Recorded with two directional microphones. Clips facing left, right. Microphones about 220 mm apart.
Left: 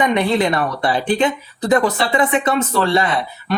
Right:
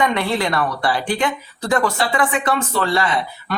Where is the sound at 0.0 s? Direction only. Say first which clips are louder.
Left 3 dB; 20° left (ahead or behind).